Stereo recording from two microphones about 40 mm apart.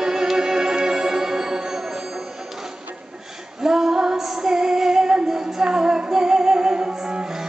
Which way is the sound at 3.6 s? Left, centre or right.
Centre.